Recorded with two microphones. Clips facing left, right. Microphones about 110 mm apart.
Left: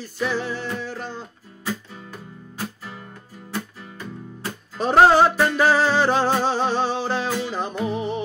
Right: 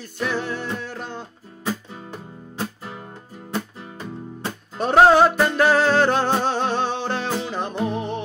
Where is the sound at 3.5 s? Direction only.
25° right (ahead or behind).